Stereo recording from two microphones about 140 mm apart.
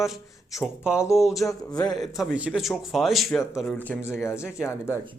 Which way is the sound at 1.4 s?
25° left (ahead or behind).